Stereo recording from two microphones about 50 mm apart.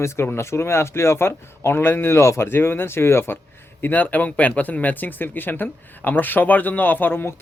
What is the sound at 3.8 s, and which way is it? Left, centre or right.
Speech, left.